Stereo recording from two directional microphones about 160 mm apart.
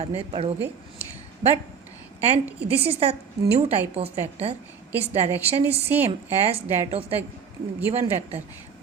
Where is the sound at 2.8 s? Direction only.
40° right (ahead or behind).